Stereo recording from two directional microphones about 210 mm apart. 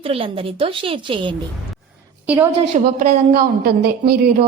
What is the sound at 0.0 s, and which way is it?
A woman's voice, 25° right (ahead or behind).